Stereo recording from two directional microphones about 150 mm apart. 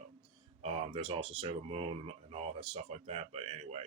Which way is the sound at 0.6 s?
45° right (ahead or behind).